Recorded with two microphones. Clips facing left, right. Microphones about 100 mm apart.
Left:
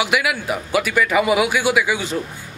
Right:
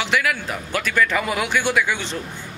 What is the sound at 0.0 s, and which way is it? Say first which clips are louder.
A man's voice: left 2 dB; 10° left (ahead or behind).